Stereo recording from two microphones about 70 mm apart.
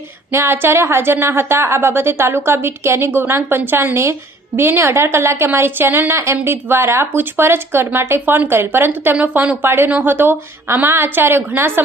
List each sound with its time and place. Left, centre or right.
0.3 s a woman's voice: right